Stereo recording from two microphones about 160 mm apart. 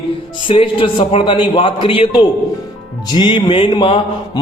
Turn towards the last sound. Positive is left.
turn(degrees=30)  # may be behind; listen again after turning